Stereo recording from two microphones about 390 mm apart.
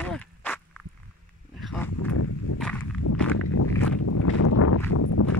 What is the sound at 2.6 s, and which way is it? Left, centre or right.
Walk, centre.